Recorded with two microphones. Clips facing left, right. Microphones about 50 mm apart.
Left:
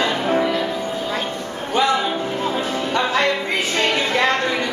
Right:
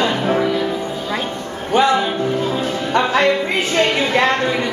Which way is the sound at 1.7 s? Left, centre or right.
Centre.